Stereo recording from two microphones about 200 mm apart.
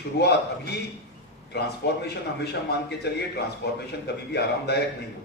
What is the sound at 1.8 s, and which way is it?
A man's voice, 55° left (ahead or behind).